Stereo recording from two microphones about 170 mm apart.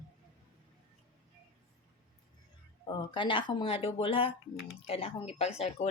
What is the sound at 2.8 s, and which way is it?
Speech, 30° left (ahead or behind).